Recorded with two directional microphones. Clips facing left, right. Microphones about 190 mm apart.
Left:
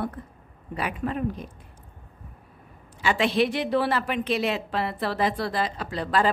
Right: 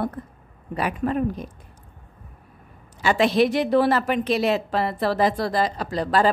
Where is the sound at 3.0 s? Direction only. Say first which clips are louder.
Right 4 dB; 40° right (ahead or behind).